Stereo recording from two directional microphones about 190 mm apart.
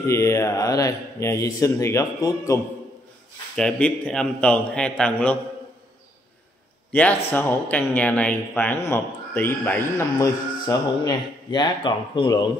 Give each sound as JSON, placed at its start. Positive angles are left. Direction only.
{"t": 0.0, "sound": "speech", "side_deg": 15}
{"t": 3.5, "sound": "a man's voice", "side_deg": 5}
{"t": 6.9, "sound": "a man's voice", "side_deg": 10}